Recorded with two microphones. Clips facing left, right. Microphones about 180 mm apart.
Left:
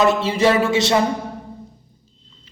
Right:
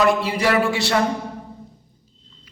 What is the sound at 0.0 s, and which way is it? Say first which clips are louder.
A man's voice: left 2 dB; 25° left (ahead or behind).